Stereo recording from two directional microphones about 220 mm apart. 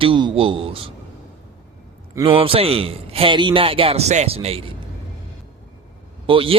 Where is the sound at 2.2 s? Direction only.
25° right (ahead or behind).